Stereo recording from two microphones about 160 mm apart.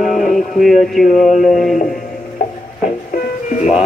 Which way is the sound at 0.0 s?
55° left (ahead or behind).